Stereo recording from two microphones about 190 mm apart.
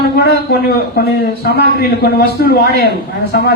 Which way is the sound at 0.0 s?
55° left (ahead or behind).